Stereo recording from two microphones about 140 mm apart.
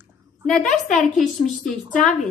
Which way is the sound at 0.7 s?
60° left (ahead or behind).